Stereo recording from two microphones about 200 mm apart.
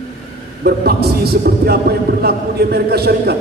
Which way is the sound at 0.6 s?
50° right (ahead or behind).